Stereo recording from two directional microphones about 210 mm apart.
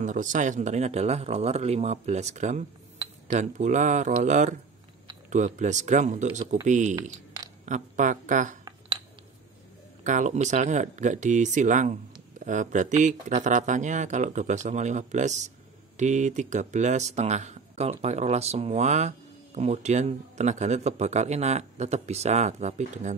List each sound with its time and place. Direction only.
0.0 s speech: 35° right (ahead or behind)
10.0 s speech: 35° right (ahead or behind)